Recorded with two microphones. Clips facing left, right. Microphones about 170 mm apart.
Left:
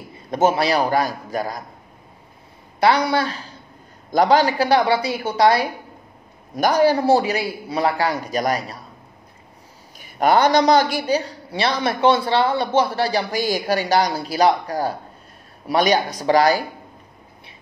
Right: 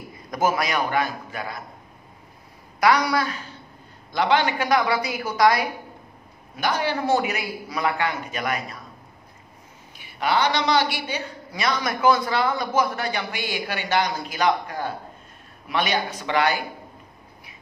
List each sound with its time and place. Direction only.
0.3 s a woman's voice: 30° left (ahead or behind)
2.8 s a woman's voice: 25° left (ahead or behind)
4.1 s a woman's voice: 40° left (ahead or behind)
6.5 s a woman's voice: 40° left (ahead or behind)
9.9 s a woman's voice: 45° left (ahead or behind)